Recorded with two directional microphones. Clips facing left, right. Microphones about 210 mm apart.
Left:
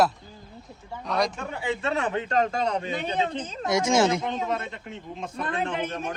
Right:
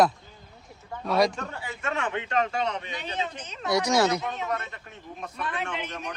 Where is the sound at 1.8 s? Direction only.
35° left (ahead or behind).